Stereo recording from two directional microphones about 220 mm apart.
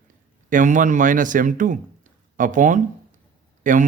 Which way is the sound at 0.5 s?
35° right (ahead or behind).